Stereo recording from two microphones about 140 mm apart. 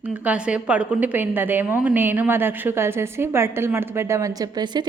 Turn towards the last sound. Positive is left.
turn(degrees=-25)  # may be behind; listen again after turning